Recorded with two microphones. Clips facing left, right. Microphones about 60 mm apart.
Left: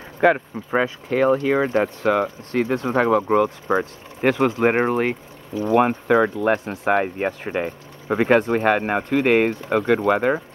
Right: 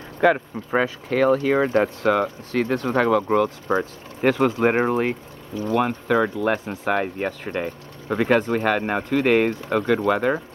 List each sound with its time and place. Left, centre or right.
0.2 s speech: centre
5.8 s speech: left